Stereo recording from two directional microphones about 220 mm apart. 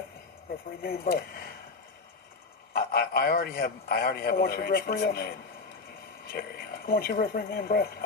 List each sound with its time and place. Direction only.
0.8 s a man's voice: 45° left (ahead or behind)
2.7 s a man's voice: 40° left (ahead or behind)